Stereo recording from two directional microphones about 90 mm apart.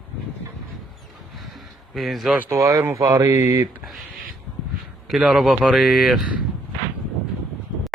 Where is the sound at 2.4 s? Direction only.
35° right (ahead or behind).